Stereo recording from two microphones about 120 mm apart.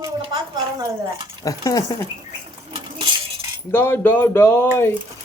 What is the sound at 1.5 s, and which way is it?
Speech, 30° left (ahead or behind).